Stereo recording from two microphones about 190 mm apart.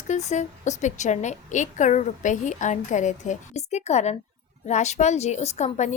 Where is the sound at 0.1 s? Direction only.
40° left (ahead or behind).